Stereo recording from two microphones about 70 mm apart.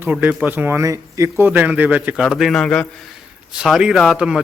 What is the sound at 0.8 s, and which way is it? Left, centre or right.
Speech, right.